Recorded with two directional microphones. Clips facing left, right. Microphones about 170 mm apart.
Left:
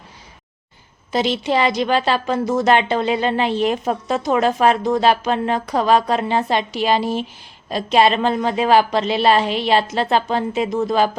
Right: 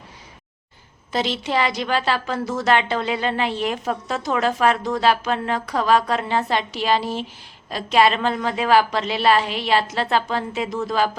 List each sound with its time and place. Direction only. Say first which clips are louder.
1.1 s a woman's voice: left 4 dB; 15° left (ahead or behind)